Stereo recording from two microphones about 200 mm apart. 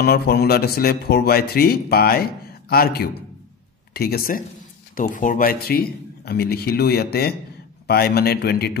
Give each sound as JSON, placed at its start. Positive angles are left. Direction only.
{"t": 0.0, "sound": "a man's voice", "side_deg": 50}